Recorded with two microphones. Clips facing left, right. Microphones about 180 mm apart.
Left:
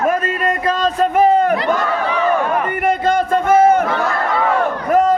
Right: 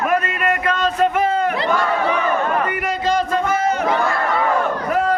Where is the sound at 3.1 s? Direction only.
55° left (ahead or behind).